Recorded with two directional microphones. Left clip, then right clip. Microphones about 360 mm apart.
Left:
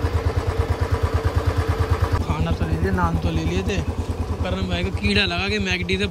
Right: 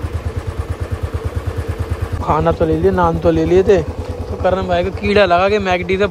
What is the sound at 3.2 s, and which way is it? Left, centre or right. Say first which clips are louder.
A man's voice: right 15 dB; centre.